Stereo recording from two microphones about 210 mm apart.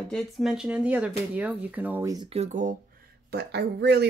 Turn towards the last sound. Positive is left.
turn(degrees=-50)  # may be behind; listen again after turning